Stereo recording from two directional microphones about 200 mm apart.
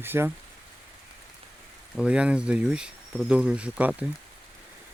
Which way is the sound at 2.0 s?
5° right (ahead or behind).